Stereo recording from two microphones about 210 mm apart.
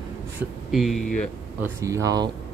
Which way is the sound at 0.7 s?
Centre (ahead or behind).